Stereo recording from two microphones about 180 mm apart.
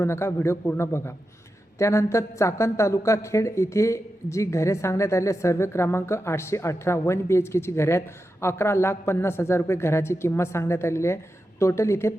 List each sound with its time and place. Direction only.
0.0 s a woman's voice: 15° left (ahead or behind)